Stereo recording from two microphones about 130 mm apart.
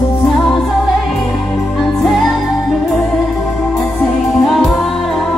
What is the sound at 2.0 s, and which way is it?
Music, centre (ahead or behind).